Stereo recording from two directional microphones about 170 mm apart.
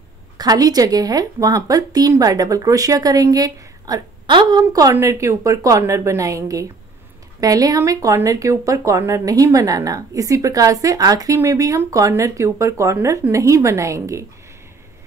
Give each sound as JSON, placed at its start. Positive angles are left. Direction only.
{"t": 0.4, "sound": "speech", "side_deg": -20}